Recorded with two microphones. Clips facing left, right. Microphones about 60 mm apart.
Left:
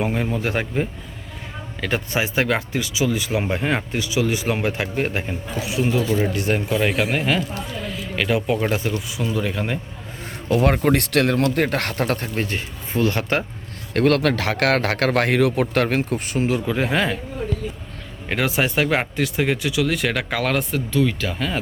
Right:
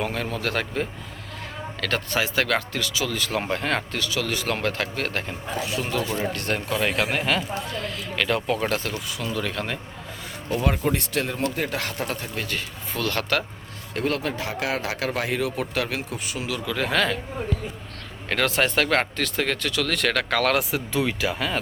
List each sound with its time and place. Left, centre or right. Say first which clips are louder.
0.0 s speech: left 4 dB; centre
10.5 s speech: left 6 dB; left
12.4 s speech: left 4 dB; left
13.9 s speech: left 8 dB; left
16.7 s speech: left 2 dB; centre
18.3 s speech: left 1 dB; centre
20.9 s speech: left 3 dB; centre